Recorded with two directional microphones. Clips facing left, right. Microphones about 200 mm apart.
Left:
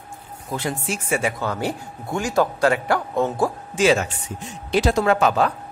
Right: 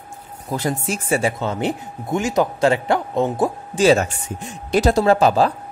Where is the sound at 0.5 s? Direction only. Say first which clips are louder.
Right 3 dB; 40° right (ahead or behind); by 3.5 s 20° right (ahead or behind).